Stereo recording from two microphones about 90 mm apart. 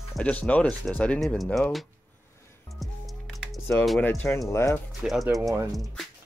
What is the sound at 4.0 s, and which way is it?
Speech, 20° left (ahead or behind).